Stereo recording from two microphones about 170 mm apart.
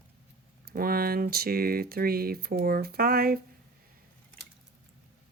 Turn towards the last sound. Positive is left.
turn(degrees=-60)  # may be behind; listen again after turning